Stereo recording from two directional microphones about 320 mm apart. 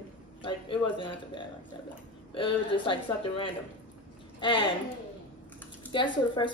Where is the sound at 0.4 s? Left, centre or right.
Centre.